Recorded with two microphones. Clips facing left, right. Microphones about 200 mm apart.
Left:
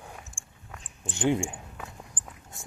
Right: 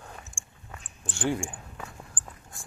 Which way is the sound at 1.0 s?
20° left (ahead or behind).